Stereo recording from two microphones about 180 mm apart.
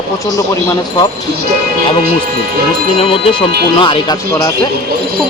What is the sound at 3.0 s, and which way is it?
Speech, 30° left (ahead or behind).